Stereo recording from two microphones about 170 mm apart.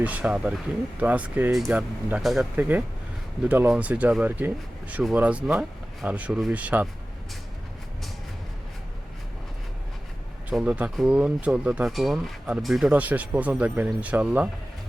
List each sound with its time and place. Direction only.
0.0 s speech: 10° right (ahead or behind)
10.5 s speech: 5° right (ahead or behind)